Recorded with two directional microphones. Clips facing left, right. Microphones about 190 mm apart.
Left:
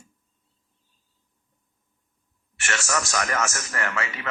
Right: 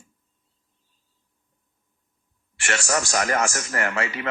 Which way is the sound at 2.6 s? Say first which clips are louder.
Right 3 dB; 30° right (ahead or behind).